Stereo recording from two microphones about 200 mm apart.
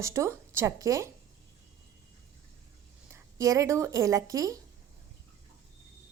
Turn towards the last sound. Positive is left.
turn(degrees=-15)  # may be behind; listen again after turning